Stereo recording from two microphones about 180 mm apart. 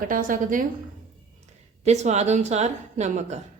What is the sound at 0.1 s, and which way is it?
Speech, 50° right (ahead or behind).